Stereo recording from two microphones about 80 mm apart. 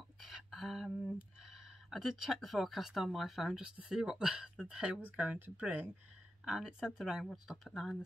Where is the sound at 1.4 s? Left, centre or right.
Centre.